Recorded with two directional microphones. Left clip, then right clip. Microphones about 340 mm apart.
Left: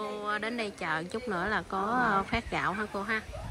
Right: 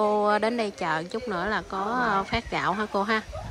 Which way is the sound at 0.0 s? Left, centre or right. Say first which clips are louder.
Right 11 dB; centre.